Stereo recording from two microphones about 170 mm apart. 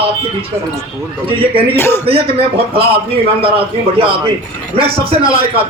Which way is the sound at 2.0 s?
35° right (ahead or behind).